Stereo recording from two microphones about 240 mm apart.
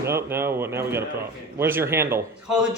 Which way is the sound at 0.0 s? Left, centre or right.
Centre.